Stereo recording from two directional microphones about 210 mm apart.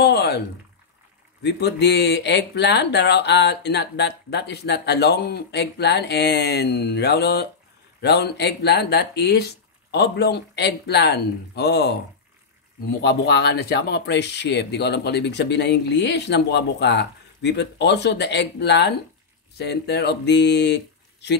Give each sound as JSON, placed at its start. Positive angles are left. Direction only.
{"t": 0.0, "sound": "a sound", "side_deg": 50}
{"t": 1.4, "sound": "speech", "side_deg": 55}
{"t": 13.0, "sound": "speech", "side_deg": 50}